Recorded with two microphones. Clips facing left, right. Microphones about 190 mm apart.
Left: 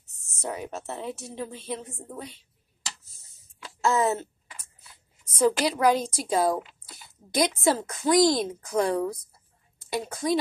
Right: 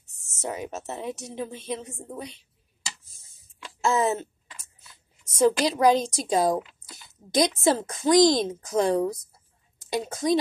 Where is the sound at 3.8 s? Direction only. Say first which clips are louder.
Even; 15° right (ahead or behind).